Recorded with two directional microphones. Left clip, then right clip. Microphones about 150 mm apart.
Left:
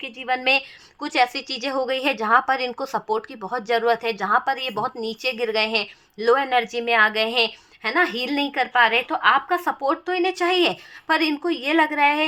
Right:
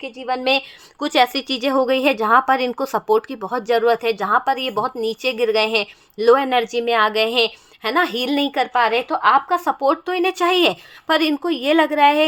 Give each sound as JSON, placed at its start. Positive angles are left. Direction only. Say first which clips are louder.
{"t": 0.0, "sound": "a woman's voice", "louder": "right 1 dB", "side_deg": -15}
{"t": 0.9, "sound": "speech", "louder": "right 4 dB", "side_deg": -35}